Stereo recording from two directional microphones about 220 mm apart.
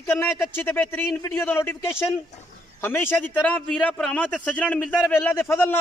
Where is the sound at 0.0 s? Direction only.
10° left (ahead or behind).